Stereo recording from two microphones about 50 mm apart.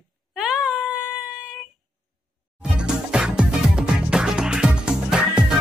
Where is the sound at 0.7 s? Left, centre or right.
Right.